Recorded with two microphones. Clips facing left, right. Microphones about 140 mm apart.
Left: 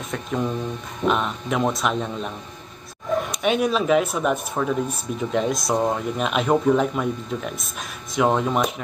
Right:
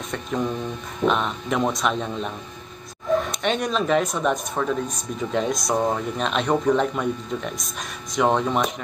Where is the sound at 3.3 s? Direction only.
5° left (ahead or behind).